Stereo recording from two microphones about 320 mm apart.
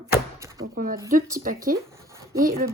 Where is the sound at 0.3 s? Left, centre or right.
Centre.